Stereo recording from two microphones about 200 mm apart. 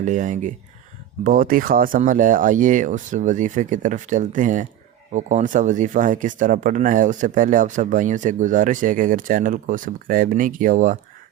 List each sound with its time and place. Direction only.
0.0 s speech: 40° right (ahead or behind)